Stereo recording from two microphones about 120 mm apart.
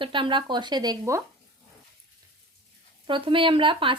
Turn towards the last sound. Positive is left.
turn(degrees=-45)  # may be behind; listen again after turning